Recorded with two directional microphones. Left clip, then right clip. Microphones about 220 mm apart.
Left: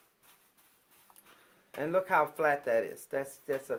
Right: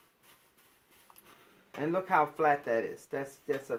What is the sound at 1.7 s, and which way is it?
Speech, 35° left (ahead or behind).